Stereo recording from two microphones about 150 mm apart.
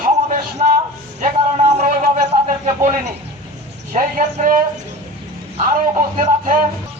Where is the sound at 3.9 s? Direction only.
55° right (ahead or behind).